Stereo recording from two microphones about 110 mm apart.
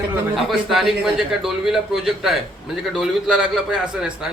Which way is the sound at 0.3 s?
Centre (ahead or behind).